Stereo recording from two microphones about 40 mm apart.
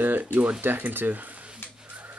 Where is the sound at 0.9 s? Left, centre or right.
Right.